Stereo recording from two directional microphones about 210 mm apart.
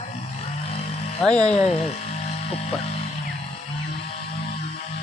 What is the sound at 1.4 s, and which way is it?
Speech, 30° left (ahead or behind).